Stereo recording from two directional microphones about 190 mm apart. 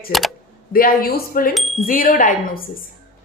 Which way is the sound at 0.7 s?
50° left (ahead or behind).